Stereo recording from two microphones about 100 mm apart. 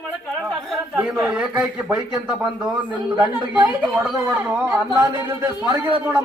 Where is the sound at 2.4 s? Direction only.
Centre (ahead or behind).